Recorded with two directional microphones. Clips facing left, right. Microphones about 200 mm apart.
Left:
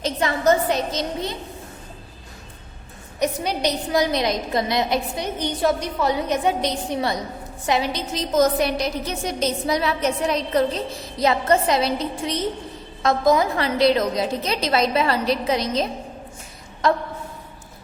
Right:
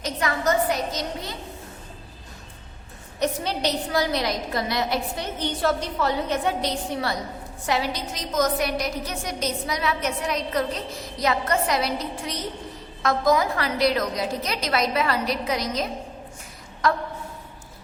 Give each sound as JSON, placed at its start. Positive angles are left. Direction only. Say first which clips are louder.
{"t": 0.0, "sound": "a woman's voice", "louder": "left 4 dB", "side_deg": 25}
{"t": 3.2, "sound": "a woman's voice", "louder": "left 2 dB", "side_deg": 15}